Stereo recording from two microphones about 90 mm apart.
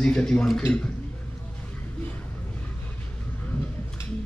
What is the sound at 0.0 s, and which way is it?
Speech, 10° left (ahead or behind).